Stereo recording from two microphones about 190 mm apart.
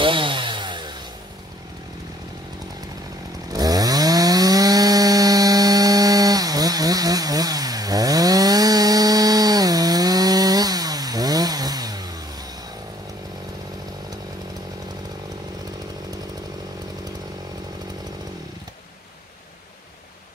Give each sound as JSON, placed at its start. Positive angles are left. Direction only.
{"t": 0.0, "sound": "chainsaw", "side_deg": -25}
{"t": 3.4, "sound": "chainsaw", "side_deg": -20}